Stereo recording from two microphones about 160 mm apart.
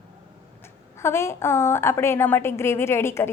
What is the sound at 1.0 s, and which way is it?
A woman's voice, 15° left (ahead or behind).